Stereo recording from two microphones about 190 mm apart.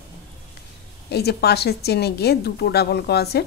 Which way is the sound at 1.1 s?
60° left (ahead or behind).